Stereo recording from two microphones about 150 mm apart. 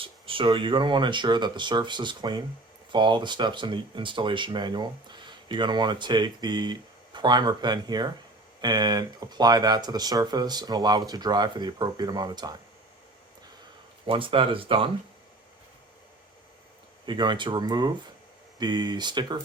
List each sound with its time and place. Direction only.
0.0 s speech: 35° right (ahead or behind)
14.1 s speech: 35° right (ahead or behind)
17.1 s speech: 30° right (ahead or behind)